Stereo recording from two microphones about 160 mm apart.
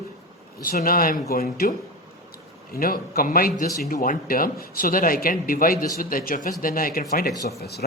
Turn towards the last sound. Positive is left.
turn(degrees=85)